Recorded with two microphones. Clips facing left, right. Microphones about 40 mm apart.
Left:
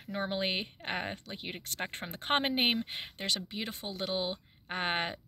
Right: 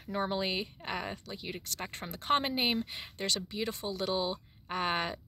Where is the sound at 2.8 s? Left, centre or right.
Left.